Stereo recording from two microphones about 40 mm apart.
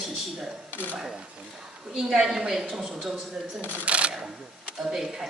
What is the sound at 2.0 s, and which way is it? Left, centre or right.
A woman's voice, centre.